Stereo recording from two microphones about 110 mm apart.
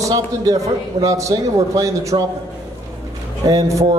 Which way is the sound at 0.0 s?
30° right (ahead or behind).